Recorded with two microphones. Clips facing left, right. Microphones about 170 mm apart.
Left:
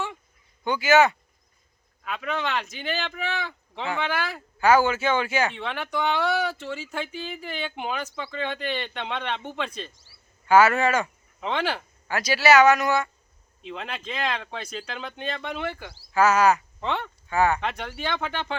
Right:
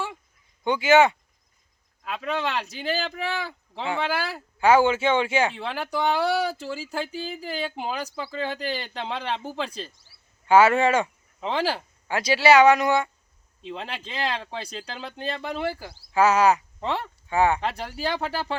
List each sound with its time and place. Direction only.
0.6 s speech: 25° right (ahead or behind)